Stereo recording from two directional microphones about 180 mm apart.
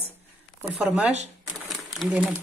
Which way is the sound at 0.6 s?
5° right (ahead or behind).